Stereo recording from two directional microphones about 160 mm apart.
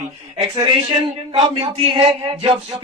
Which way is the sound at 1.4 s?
40° right (ahead or behind).